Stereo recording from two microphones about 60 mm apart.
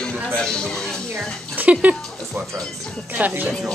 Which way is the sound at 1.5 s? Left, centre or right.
Right.